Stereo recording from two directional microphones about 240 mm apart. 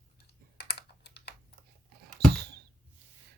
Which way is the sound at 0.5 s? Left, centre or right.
Left.